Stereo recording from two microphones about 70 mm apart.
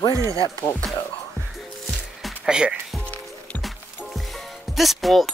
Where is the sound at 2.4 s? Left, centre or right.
Centre.